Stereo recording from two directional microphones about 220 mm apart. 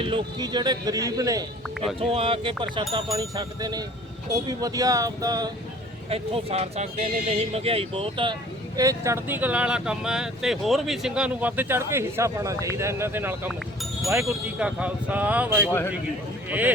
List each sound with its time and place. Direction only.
0.0 s a man's voice: 20° right (ahead or behind)
6.1 s speech: 25° right (ahead or behind); by 16.7 s 5° right (ahead or behind)